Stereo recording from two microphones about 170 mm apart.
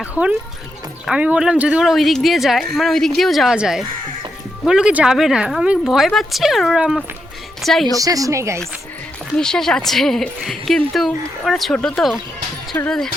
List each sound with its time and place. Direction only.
0.0 s speech: 5° right (ahead or behind)
7.9 s speech: 20° right (ahead or behind)
9.3 s speech: 5° left (ahead or behind)
12.7 s speech: 10° left (ahead or behind)